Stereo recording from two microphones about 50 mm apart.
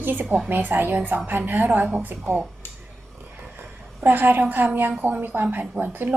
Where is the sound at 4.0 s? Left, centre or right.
Right.